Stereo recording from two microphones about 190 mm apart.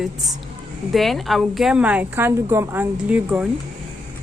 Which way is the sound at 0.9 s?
Centre (ahead or behind).